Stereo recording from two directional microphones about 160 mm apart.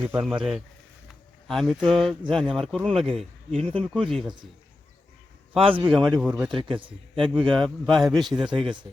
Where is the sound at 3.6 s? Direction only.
35° right (ahead or behind).